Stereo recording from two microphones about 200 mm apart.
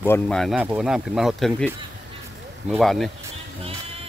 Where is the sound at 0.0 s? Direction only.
10° left (ahead or behind).